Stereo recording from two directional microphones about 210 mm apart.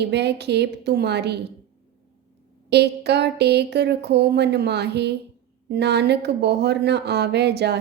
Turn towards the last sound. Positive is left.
turn(degrees=-50)  # may be behind; listen again after turning